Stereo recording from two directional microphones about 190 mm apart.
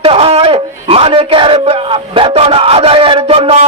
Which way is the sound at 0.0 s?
30° right (ahead or behind).